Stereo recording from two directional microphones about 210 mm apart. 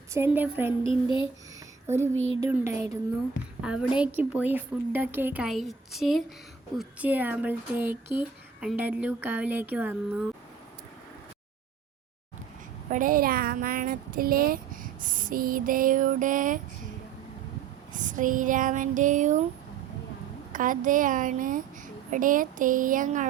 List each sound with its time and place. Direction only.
0.1 s speech: 10° right (ahead or behind)
0.9 s a sound: 25° left (ahead or behind)
2.1 s speech: 65° right (ahead or behind)
2.4 s a woman's voice: 15° right (ahead or behind)
12.9 s speech: 40° right (ahead or behind)
17.9 s speech: 40° right (ahead or behind)
20.5 s speech: 40° right (ahead or behind)